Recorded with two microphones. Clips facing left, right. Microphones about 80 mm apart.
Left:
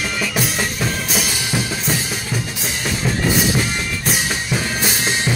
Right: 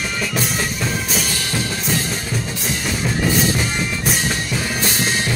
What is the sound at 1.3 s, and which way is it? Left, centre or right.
Music, centre.